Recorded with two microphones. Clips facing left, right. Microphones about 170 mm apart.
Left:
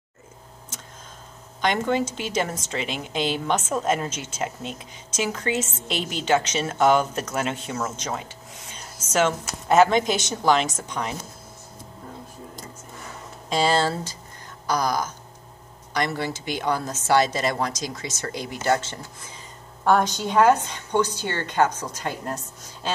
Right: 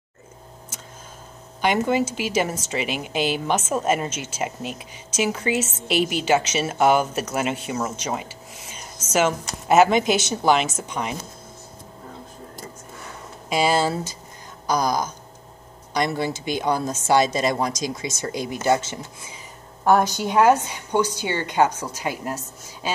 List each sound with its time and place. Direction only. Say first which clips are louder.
1.6 s a woman's voice: right 2 dB; 10° right (ahead or behind)
13.5 s a woman's voice: right 1 dB; 10° right (ahead or behind)